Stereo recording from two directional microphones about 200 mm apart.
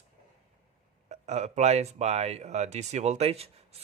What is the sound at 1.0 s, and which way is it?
Speech, 35° right (ahead or behind).